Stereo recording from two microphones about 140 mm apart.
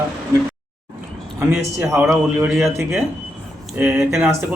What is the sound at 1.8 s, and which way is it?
Speech, 20° right (ahead or behind).